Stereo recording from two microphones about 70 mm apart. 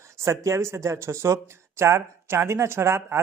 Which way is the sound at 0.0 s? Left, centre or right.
Right.